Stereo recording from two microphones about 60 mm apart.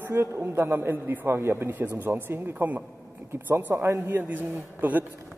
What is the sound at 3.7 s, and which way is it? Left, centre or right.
Speech, right.